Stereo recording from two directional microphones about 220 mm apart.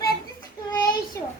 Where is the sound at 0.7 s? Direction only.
20° left (ahead or behind).